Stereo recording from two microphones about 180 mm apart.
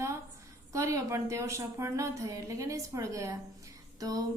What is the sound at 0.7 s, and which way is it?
A woman's voice, 15° right (ahead or behind).